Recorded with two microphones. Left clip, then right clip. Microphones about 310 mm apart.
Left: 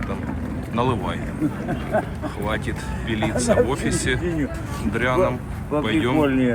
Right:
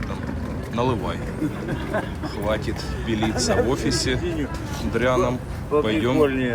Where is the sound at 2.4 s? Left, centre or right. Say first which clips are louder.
Right 2 dB; centre.